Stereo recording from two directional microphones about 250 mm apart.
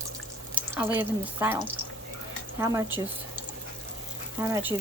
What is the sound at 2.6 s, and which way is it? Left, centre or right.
Speech, centre.